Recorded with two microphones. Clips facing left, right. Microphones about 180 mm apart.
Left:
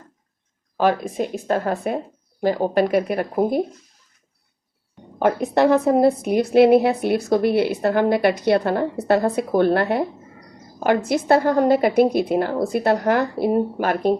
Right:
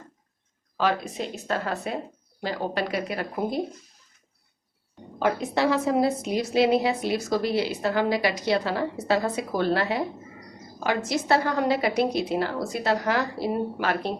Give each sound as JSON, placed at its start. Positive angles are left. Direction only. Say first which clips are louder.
{"t": 0.8, "sound": "a woman's voice", "louder": "left 6 dB", "side_deg": 50}
{"t": 5.2, "sound": "a woman's voice", "louder": "left 6 dB", "side_deg": 55}